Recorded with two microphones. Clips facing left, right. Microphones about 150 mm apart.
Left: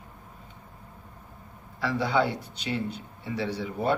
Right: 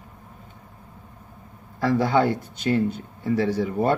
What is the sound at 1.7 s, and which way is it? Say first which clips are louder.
Speech: right 5 dB; 45° right (ahead or behind).